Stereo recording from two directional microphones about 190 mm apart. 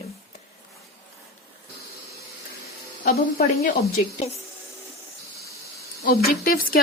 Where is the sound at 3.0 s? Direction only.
55° left (ahead or behind).